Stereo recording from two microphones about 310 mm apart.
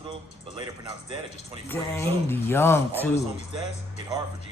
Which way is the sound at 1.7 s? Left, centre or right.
Centre.